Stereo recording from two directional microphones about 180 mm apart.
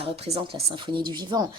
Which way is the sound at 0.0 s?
35° right (ahead or behind).